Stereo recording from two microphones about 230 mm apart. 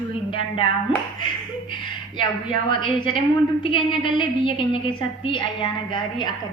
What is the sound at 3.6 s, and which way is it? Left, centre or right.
A woman's voice, left.